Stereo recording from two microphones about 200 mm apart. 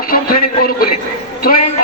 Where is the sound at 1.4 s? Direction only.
45° left (ahead or behind).